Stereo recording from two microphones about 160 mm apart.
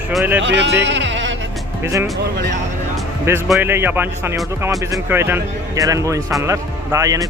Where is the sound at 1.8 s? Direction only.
15° right (ahead or behind).